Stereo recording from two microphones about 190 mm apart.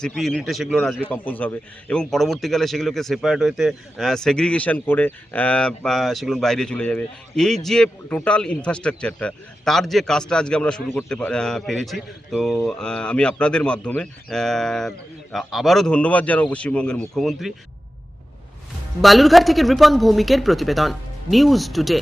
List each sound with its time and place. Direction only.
0.0 s a man's voice: centre (ahead or behind)
19.0 s a man's voice: centre (ahead or behind)